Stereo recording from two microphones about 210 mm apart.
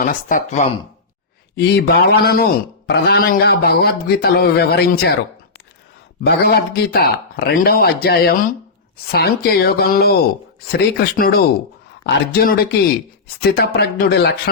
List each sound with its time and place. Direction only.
0.0 s speech: 40° left (ahead or behind)
1.5 s speech: 50° left (ahead or behind)
6.2 s speech: 50° left (ahead or behind)